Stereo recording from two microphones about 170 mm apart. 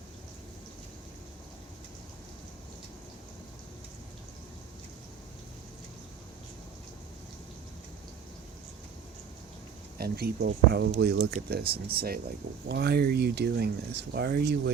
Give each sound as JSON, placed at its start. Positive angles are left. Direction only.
{"t": 10.0, "sound": "speech", "side_deg": -70}
{"t": 12.6, "sound": "speech", "side_deg": -80}